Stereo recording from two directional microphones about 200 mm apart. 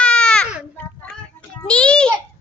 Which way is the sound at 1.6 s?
5° left (ahead or behind).